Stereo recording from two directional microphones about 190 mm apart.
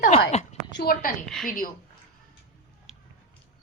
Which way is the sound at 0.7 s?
55° left (ahead or behind).